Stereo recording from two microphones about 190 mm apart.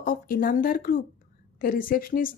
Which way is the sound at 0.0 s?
50° left (ahead or behind).